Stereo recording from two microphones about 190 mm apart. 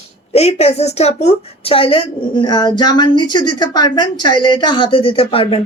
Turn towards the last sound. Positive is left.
turn(degrees=30)  # may be behind; listen again after turning